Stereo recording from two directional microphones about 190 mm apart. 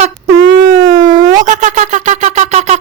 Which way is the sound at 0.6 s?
45° right (ahead or behind).